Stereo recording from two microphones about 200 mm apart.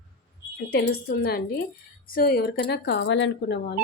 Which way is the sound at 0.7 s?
50° left (ahead or behind).